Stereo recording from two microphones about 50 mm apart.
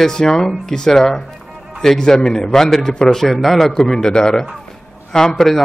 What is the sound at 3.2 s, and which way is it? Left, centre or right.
A man's voice, centre.